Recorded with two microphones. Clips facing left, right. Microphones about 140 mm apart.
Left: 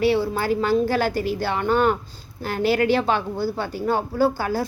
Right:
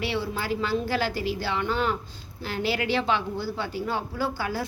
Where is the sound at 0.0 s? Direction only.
40° left (ahead or behind).